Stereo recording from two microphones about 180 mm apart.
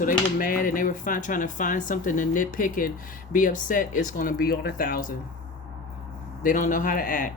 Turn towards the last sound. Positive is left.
turn(degrees=50)  # may be behind; listen again after turning